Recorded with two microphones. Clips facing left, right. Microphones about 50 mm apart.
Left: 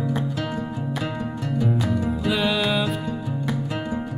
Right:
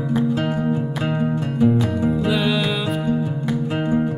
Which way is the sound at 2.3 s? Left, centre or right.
Centre.